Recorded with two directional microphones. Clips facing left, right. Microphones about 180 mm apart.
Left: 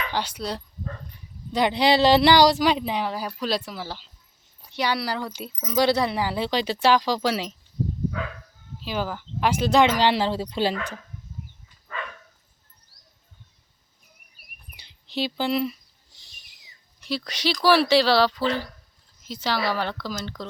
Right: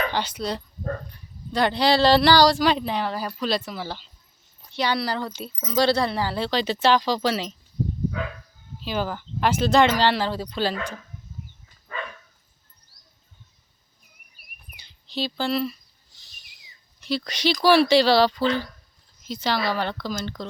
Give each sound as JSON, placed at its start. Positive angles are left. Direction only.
{"t": 0.1, "sound": "speech", "side_deg": 10}
{"t": 1.5, "sound": "speech", "side_deg": 20}
{"t": 8.8, "sound": "speech", "side_deg": 5}
{"t": 14.8, "sound": "speech", "side_deg": 20}
{"t": 17.1, "sound": "speech", "side_deg": 5}